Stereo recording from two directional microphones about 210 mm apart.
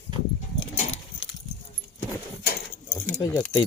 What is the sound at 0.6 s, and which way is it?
Keys jangling, 30° left (ahead or behind).